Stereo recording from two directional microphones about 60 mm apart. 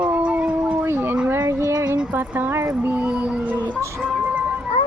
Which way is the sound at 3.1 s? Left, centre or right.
Right.